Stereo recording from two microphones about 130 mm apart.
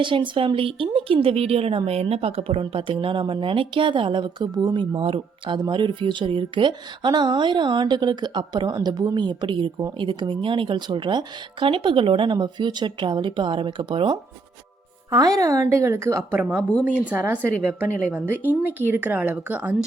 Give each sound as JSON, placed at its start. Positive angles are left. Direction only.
{"t": 0.0, "sound": "a woman's voice", "side_deg": -40}
{"t": 15.1, "sound": "a woman's voice", "side_deg": -25}
{"t": 16.4, "sound": "speech", "side_deg": -10}